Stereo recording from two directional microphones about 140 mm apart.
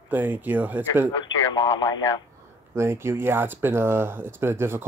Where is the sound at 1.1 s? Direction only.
35° left (ahead or behind).